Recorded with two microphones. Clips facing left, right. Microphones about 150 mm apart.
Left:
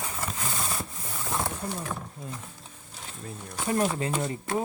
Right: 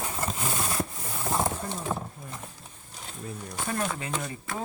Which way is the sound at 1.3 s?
20° right (ahead or behind).